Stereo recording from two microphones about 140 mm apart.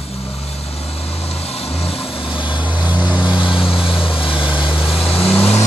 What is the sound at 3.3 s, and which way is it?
Vehicle, 35° left (ahead or behind).